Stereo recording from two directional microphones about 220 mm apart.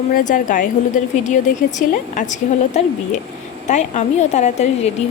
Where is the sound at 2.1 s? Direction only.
35° left (ahead or behind).